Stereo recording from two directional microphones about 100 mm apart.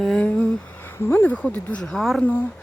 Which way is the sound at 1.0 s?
20° left (ahead or behind).